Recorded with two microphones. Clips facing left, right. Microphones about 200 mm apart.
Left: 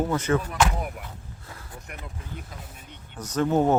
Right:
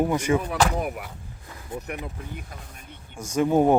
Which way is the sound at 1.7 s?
20° right (ahead or behind).